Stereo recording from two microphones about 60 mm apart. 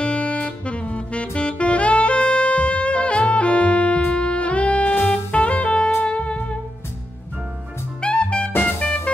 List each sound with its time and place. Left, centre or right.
0.0 s saxophone: left
6.0 s music: centre
8.0 s music: centre